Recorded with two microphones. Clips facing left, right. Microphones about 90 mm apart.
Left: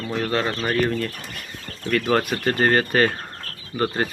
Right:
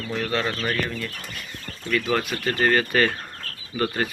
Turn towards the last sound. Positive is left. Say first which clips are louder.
# left 2 dB
turn(degrees=30)  # may be behind; listen again after turning